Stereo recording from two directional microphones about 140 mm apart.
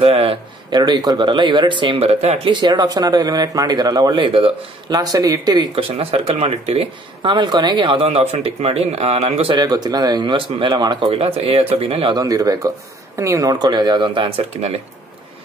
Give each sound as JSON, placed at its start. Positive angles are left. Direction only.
{"t": 0.0, "sound": "a man's voice", "side_deg": -40}
{"t": 0.7, "sound": "speech", "side_deg": -30}
{"t": 4.9, "sound": "speech", "side_deg": -25}
{"t": 5.8, "sound": "speech", "side_deg": -45}
{"t": 7.2, "sound": "speech", "side_deg": -30}
{"t": 9.6, "sound": "speech", "side_deg": -30}
{"t": 11.1, "sound": "speech", "side_deg": -45}
{"t": 12.2, "sound": "speech", "side_deg": -25}